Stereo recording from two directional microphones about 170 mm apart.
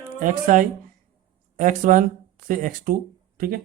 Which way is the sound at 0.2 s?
50° right (ahead or behind).